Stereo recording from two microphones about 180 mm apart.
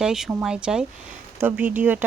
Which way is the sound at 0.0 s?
5° right (ahead or behind).